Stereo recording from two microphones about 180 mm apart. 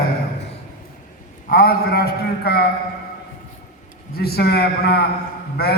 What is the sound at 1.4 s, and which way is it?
A man's voice, 60° left (ahead or behind).